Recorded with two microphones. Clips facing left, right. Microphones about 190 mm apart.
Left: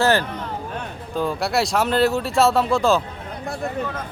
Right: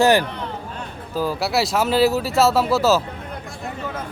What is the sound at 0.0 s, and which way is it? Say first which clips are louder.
Speech: right 3 dB; 15° right (ahead or behind).